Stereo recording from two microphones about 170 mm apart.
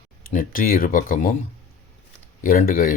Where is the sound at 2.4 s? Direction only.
55° left (ahead or behind).